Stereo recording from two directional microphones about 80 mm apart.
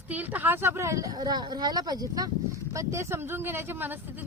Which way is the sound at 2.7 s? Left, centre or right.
Right.